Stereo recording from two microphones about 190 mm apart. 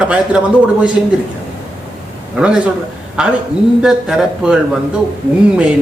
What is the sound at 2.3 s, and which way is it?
A man's voice, 5° right (ahead or behind).